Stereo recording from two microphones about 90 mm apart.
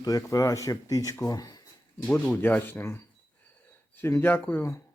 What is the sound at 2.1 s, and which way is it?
Speech, 15° left (ahead or behind).